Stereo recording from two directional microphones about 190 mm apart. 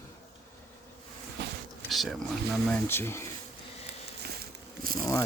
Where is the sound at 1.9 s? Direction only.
Centre (ahead or behind).